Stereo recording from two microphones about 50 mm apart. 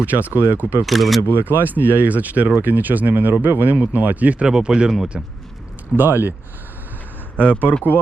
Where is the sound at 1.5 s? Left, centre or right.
Left.